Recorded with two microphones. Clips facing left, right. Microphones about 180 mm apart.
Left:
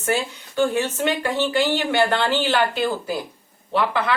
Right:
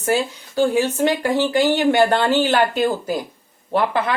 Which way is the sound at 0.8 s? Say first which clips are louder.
Right 4 dB; 35° right (ahead or behind).